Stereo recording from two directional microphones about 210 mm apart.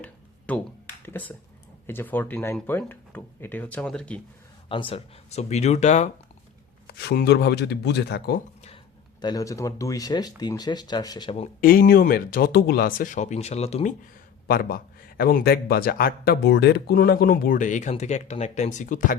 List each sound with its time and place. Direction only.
0.0 s a sound: 5° left (ahead or behind)
1.0 s speech: 10° left (ahead or behind)
4.7 s speech: 25° left (ahead or behind)
6.8 s speech: 50° left (ahead or behind)
9.2 s speech: 15° left (ahead or behind)
11.6 s speech: 45° left (ahead or behind)
14.4 s speech: 45° left (ahead or behind)